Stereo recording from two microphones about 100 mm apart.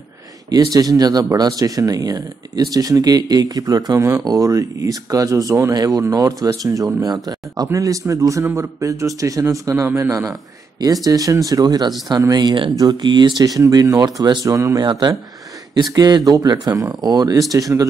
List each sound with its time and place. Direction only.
0.5 s speech: 35° right (ahead or behind)
14.8 s speech: 45° right (ahead or behind)